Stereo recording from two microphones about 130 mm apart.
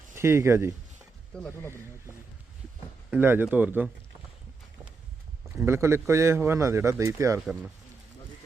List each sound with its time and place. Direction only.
0.1 s speech: 20° right (ahead or behind)
1.3 s speech: 10° left (ahead or behind)
3.1 s speech: 15° right (ahead or behind)
5.6 s a man's voice: 20° right (ahead or behind)